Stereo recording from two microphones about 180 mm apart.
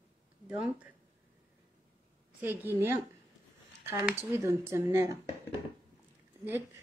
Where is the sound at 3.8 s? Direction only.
15° right (ahead or behind).